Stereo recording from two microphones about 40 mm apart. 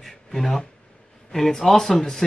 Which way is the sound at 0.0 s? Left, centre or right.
Centre.